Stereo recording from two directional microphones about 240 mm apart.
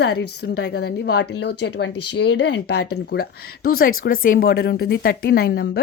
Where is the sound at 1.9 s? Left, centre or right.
Left.